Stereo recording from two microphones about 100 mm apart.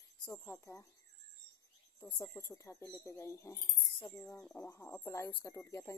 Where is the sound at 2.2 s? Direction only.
30° left (ahead or behind).